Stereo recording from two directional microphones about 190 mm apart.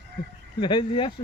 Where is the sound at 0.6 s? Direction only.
25° left (ahead or behind).